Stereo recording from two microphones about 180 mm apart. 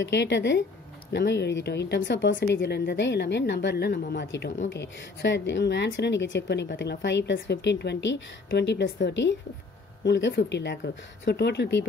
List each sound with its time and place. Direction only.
0.0 s a woman's voice: 80° left